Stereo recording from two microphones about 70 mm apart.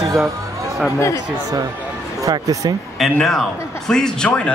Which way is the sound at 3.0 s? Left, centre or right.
Centre.